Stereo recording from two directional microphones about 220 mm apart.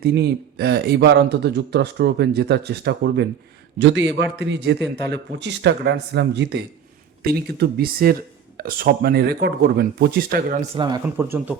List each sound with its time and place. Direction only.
0.0 s speech: 50° right (ahead or behind)
10.8 s speech: 20° right (ahead or behind)